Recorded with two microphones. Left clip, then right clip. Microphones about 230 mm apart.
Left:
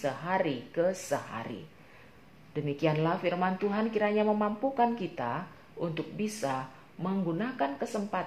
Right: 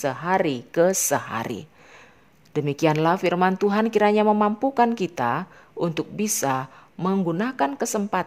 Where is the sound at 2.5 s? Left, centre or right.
Right.